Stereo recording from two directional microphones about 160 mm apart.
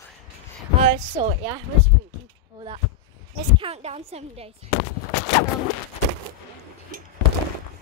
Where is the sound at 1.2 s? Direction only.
20° right (ahead or behind).